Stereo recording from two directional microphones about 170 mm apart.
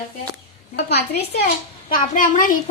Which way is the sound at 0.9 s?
75° left (ahead or behind).